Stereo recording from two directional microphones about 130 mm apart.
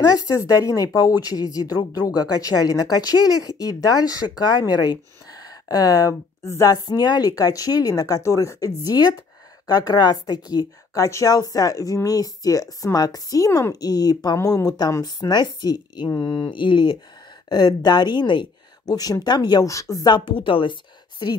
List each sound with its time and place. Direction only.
0.0 s speech: 25° left (ahead or behind)